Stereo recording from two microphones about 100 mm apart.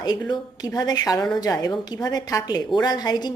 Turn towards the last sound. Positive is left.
turn(degrees=45)  # may be behind; listen again after turning